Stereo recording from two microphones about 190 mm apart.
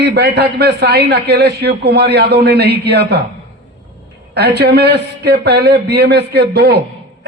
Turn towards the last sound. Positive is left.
turn(degrees=-60)  # may be behind; listen again after turning